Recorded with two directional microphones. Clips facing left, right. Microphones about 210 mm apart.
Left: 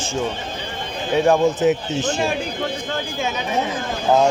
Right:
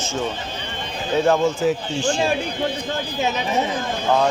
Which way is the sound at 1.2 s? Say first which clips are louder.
Left 3 dB; 15° left (ahead or behind).